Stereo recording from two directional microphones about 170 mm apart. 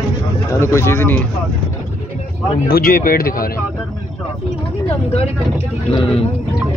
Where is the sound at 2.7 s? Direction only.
55° left (ahead or behind).